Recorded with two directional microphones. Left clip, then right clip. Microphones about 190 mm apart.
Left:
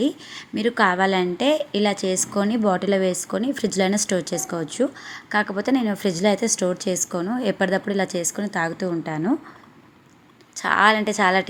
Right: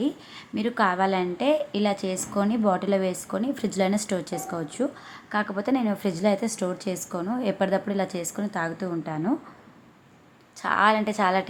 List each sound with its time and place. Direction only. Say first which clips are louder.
0.0 s a woman's voice: left 5 dB; 15° left (ahead or behind)
10.5 s a woman's voice: left 4 dB; 20° left (ahead or behind)